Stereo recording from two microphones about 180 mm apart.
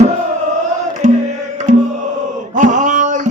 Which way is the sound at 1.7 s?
40° right (ahead or behind).